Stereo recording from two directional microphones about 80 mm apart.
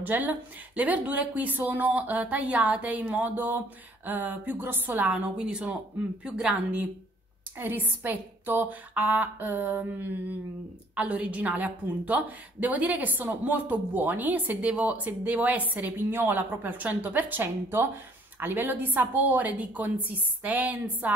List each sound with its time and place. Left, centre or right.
0.0 s a woman's voice: right
7.5 s a woman's voice: right